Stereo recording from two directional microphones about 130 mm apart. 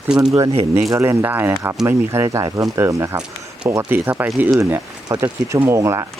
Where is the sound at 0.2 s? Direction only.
25° right (ahead or behind).